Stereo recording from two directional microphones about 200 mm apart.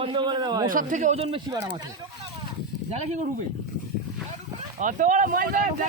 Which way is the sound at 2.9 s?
30° right (ahead or behind).